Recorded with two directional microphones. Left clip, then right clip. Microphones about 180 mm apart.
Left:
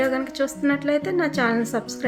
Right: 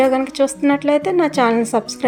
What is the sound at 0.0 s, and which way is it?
A woman's voice, 25° right (ahead or behind).